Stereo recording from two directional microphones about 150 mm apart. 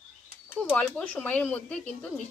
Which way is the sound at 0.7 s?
5° left (ahead or behind).